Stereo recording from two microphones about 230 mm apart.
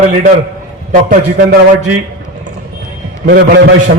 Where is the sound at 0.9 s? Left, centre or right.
Right.